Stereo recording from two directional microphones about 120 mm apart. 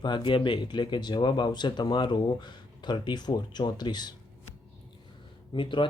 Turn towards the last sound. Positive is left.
turn(degrees=45)  # may be behind; listen again after turning